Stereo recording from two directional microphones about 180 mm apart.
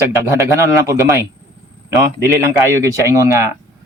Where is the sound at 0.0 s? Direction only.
15° right (ahead or behind).